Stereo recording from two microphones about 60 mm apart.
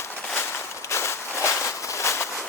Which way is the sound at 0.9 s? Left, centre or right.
Left.